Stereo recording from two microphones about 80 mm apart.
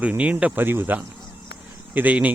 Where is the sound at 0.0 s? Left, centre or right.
Centre.